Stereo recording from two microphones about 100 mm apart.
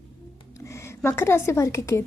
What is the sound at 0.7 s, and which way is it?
A woman's voice, 25° left (ahead or behind).